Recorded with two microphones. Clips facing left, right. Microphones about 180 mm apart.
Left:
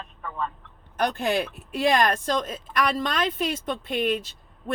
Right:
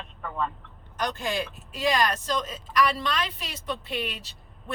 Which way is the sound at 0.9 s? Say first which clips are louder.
Left 5 dB; 55° left (ahead or behind).